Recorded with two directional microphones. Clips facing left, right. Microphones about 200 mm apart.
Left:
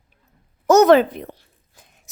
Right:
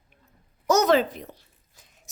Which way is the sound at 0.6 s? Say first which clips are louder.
Left 8 dB; 55° left (ahead or behind).